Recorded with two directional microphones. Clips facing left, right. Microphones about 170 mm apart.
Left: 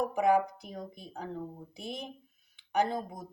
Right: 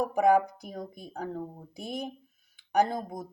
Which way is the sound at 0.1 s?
40° right (ahead or behind).